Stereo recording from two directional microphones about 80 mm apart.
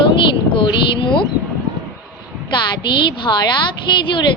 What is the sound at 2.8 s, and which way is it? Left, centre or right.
A woman's voice, left.